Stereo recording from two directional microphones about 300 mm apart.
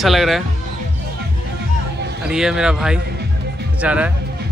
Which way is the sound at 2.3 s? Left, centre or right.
Centre.